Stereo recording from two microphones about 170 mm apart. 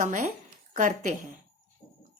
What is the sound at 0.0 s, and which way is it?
A woman's voice, 50° right (ahead or behind).